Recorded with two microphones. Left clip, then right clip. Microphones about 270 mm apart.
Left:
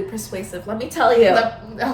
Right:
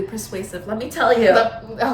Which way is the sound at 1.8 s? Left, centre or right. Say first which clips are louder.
Right 3 dB; centre.